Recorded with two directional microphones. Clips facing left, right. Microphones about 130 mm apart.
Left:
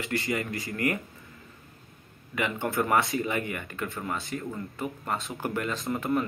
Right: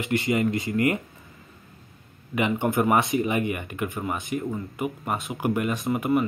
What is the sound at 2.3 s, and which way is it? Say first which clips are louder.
Speech: right 5 dB; 20° right (ahead or behind).